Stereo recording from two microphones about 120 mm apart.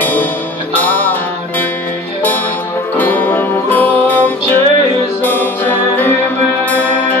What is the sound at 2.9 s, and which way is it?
Music, 15° left (ahead or behind).